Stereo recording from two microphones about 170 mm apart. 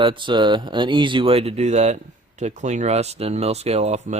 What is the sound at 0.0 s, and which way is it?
Speech, 30° right (ahead or behind).